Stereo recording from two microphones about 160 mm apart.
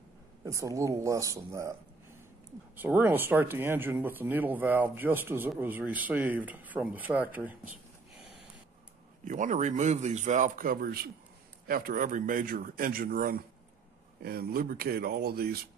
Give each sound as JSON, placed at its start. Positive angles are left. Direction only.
{"t": 0.5, "sound": "speech", "side_deg": -20}
{"t": 2.7, "sound": "speech", "side_deg": -10}
{"t": 9.2, "sound": "a man's voice", "side_deg": -55}